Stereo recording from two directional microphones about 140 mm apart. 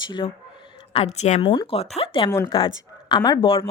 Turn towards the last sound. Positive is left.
turn(degrees=40)  # may be behind; listen again after turning